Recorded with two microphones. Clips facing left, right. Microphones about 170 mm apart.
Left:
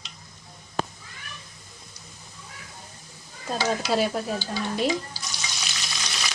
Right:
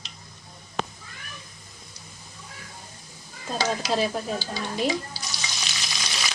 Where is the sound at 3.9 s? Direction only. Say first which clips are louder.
Left 2 dB; centre (ahead or behind).